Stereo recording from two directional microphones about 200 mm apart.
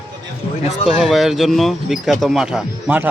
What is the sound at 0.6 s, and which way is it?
Speech, 30° left (ahead or behind).